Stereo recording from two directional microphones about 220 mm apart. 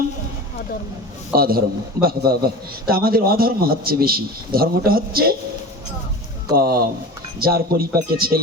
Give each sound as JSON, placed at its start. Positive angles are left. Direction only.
{"t": 1.4, "sound": "a man's voice", "side_deg": -40}
{"t": 6.6, "sound": "a man's voice", "side_deg": -45}